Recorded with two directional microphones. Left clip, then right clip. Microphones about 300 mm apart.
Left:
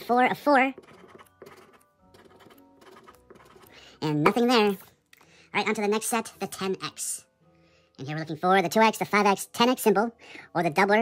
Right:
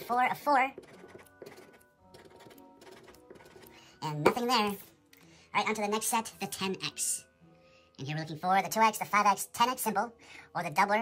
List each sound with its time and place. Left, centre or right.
0.0 s music: centre
4.4 s a woman's voice: centre